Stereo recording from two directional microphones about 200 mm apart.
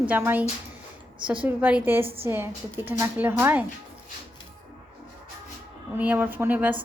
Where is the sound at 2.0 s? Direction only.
30° right (ahead or behind).